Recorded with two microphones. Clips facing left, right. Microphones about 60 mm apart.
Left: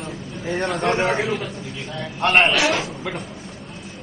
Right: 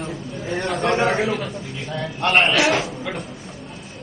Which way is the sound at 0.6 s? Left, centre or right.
Centre.